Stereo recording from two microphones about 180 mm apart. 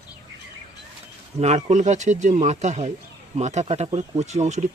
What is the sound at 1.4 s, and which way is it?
Speech, 40° right (ahead or behind).